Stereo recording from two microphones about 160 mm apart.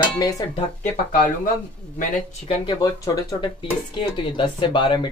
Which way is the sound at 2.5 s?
30° left (ahead or behind).